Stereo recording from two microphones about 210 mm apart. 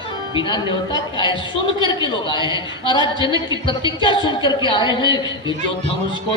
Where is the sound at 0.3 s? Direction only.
20° left (ahead or behind).